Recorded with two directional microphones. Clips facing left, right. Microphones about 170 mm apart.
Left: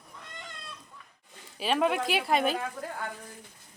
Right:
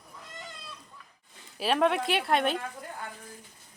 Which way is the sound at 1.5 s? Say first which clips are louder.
Right 1 dB; centre (ahead or behind).